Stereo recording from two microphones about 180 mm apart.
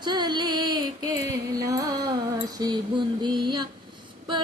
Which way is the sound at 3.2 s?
25° right (ahead or behind).